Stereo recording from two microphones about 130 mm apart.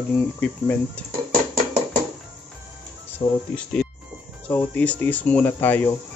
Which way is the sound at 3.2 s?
35° left (ahead or behind).